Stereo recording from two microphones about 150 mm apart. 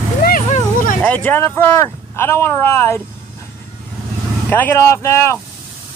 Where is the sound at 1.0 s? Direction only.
10° left (ahead or behind).